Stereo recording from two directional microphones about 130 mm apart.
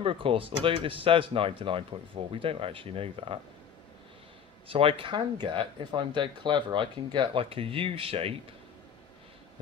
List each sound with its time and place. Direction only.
0.0 s speech: 45° right (ahead or behind)
4.6 s speech: 45° right (ahead or behind)